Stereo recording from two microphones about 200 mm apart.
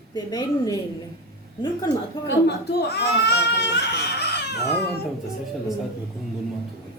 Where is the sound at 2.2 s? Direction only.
55° left (ahead or behind).